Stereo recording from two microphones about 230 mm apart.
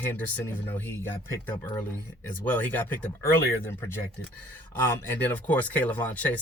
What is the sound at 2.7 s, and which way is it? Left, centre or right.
Speech, centre.